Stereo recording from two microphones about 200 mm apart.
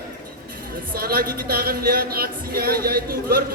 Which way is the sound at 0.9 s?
50° right (ahead or behind).